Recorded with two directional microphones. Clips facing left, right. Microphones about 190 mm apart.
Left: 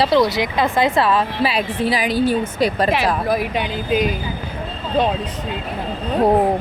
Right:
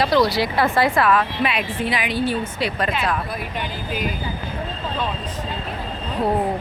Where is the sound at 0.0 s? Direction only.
20° left (ahead or behind); by 2.9 s 40° left (ahead or behind).